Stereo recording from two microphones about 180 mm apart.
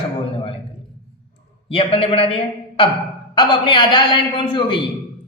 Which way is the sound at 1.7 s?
30° left (ahead or behind).